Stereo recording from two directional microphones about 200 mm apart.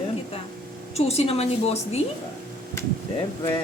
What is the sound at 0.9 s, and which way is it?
Speech, 30° left (ahead or behind).